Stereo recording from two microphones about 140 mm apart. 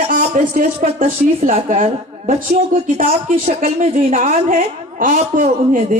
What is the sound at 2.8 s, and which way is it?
A woman's voice, 75° right (ahead or behind).